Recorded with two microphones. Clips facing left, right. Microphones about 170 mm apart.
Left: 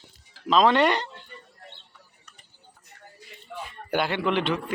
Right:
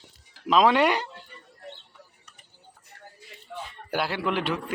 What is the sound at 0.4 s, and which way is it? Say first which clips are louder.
Speech: even; 5° right (ahead or behind).